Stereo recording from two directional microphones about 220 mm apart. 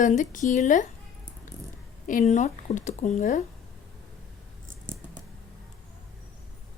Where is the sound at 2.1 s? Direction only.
35° left (ahead or behind).